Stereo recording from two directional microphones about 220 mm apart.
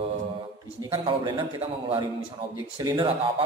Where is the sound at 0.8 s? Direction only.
20° right (ahead or behind).